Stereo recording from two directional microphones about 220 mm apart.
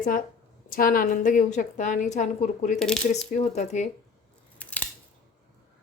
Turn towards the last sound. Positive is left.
turn(degrees=5)  # may be behind; listen again after turning